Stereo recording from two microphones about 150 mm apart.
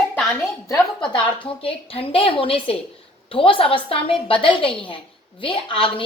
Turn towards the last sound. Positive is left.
turn(degrees=35)  # may be behind; listen again after turning